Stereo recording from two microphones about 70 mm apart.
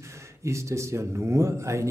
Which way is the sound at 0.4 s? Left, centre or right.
Right.